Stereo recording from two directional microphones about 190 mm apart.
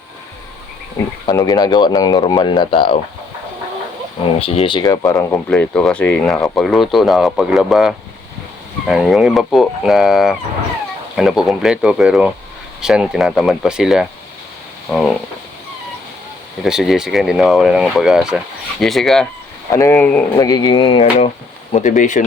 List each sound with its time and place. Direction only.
1.0 s speech: 10° left (ahead or behind); by 3.0 s 25° left (ahead or behind)
4.4 s speech: 30° left (ahead or behind)
5.5 s speech: 5° left (ahead or behind)
14.8 s a sound: centre (ahead or behind)
16.6 s speech: centre (ahead or behind)
19.7 s speech: 15° left (ahead or behind)
20.4 s speech: 20° left (ahead or behind); by 22.2 s 40° left (ahead or behind)